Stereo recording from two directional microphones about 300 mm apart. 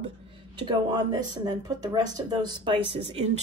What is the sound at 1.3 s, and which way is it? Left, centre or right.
Speech, centre.